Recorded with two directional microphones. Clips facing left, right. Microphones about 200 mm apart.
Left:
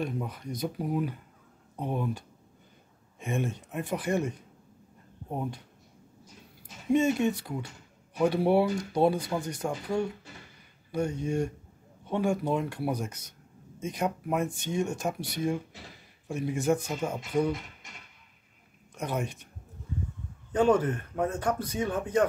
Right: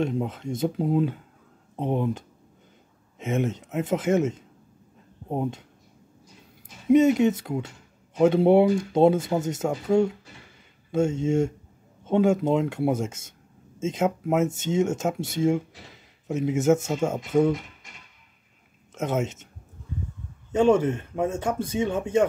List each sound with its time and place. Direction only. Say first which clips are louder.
0.0 s speech: right 7 dB; 25° right (ahead or behind)
6.9 s speech: right 7 dB; 20° right (ahead or behind)
18.9 s speech: right 6 dB; 20° right (ahead or behind)
20.5 s speech: right 4 dB; 25° right (ahead or behind)